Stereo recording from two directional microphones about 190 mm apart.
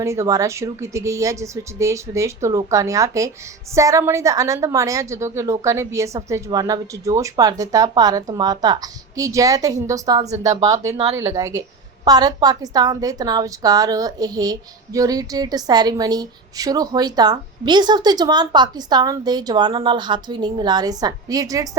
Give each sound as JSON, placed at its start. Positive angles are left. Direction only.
{"t": 0.0, "sound": "a woman's voice", "side_deg": -15}